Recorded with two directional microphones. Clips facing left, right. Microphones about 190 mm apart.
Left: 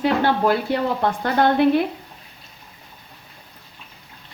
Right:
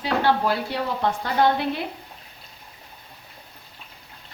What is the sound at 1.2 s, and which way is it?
Speech, 55° left (ahead or behind).